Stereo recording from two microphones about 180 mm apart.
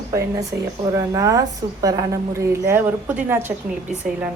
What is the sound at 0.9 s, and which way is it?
A woman's voice, 20° right (ahead or behind).